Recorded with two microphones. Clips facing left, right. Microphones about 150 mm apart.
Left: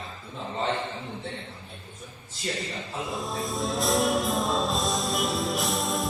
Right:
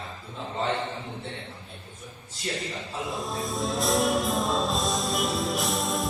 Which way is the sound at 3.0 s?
Centre (ahead or behind).